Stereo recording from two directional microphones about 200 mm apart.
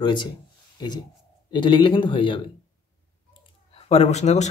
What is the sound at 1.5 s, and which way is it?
Speech, 25° left (ahead or behind).